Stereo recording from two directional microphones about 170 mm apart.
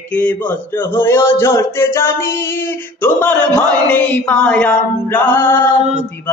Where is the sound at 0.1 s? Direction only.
10° left (ahead or behind).